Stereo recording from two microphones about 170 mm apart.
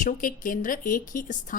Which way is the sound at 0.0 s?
50° left (ahead or behind).